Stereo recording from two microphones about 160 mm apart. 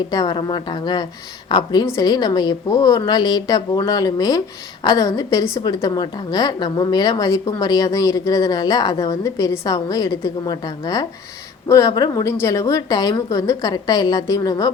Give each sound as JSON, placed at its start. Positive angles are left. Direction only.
{"t": 0.1, "sound": "a woman's voice", "side_deg": 25}